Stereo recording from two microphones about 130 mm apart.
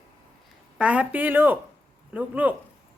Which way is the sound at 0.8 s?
10° right (ahead or behind).